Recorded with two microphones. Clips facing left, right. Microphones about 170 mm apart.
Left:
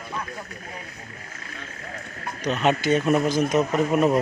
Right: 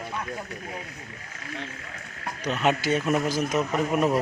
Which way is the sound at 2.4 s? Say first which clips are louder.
Left 2 dB; 10° right (ahead or behind).